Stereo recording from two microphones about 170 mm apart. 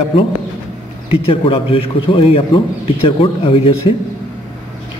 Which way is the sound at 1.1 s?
35° left (ahead or behind).